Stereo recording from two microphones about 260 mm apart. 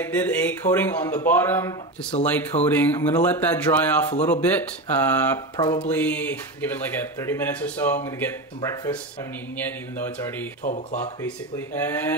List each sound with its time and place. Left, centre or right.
0.0 s speech: centre
5.6 s a sound: centre
5.9 s a sound: centre
7.2 s speech: centre
10.6 s speech: left
11.2 s speech: centre